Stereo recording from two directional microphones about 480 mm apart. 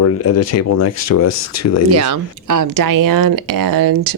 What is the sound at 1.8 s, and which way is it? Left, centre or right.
Speech, right.